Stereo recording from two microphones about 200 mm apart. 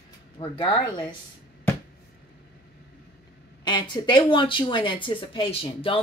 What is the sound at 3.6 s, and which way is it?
Speech, 20° left (ahead or behind).